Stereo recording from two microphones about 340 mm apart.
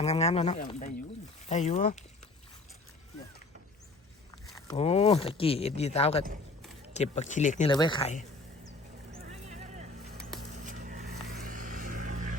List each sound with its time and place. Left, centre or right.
0.0 s speech: centre
4.4 s speech: centre
9.1 s vehicle: centre